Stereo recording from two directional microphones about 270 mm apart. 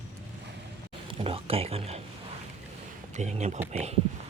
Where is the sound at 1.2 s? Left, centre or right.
Right.